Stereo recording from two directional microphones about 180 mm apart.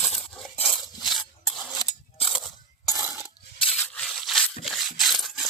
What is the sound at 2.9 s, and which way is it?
Coin, 15° right (ahead or behind).